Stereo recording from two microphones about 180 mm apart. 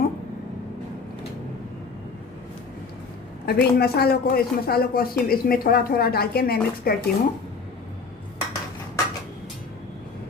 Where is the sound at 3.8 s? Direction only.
60° left (ahead or behind).